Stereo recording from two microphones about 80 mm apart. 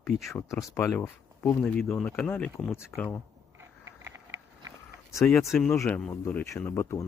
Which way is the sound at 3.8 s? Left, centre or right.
Right.